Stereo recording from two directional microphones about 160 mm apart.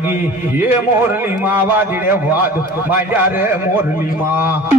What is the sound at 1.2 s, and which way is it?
A man's voice, 10° right (ahead or behind).